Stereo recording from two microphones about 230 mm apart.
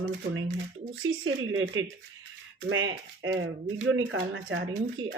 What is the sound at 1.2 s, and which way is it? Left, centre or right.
Speech, right.